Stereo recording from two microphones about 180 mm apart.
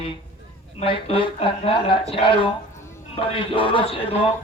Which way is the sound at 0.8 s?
30° left (ahead or behind).